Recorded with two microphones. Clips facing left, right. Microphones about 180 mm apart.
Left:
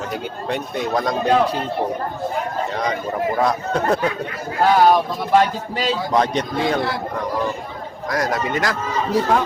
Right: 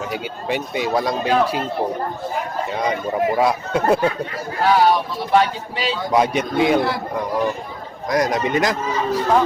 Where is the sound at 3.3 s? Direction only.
10° right (ahead or behind).